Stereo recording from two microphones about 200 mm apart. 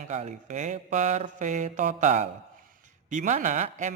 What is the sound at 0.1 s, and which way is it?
A man's voice, 35° right (ahead or behind).